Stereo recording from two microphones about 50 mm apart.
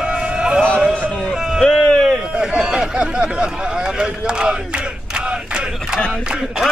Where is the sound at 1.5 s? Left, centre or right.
Centre.